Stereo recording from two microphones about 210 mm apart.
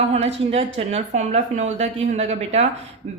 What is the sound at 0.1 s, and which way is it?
A woman's voice, 30° right (ahead or behind).